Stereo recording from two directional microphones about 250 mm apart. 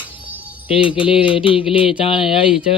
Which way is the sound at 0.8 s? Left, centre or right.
Left.